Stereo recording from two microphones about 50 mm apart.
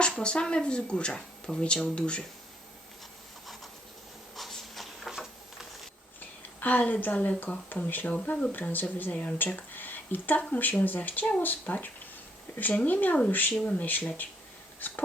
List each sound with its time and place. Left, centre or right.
0.2 s speech: centre
3.4 s a sound: centre
6.6 s speech: left
9.1 s speech: left
9.7 s speech: left
14.8 s dog: left